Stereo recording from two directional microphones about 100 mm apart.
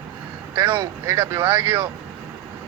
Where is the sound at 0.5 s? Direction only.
20° right (ahead or behind).